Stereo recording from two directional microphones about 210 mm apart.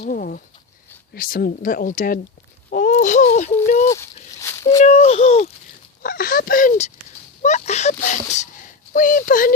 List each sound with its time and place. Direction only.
0.0 s speech: 45° left (ahead or behind)
3.8 s a sound: 15° left (ahead or behind)
4.8 s speech: 35° left (ahead or behind)
6.0 s speech: 45° left (ahead or behind)